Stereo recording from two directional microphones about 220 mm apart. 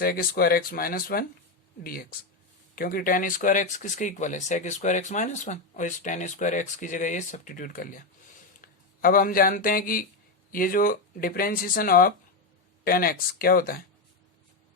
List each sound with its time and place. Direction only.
0.0 s speech: 40° left (ahead or behind)